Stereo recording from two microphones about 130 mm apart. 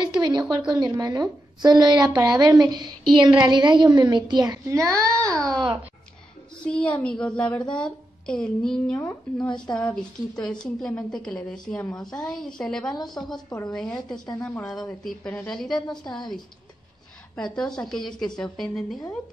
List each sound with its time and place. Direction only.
0.0 s a woman's voice: 35° right (ahead or behind)
5.2 s a child's voice: 5° left (ahead or behind)
12.9 s a woman's voice: 30° left (ahead or behind)
13.7 s a child's voice: 5° left (ahead or behind)
17.4 s a woman's voice: 5° left (ahead or behind)